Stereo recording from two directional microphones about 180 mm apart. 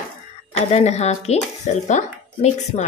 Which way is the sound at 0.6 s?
35° left (ahead or behind).